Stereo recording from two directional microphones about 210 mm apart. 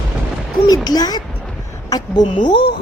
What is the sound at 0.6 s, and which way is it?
A woman's voice, 20° left (ahead or behind).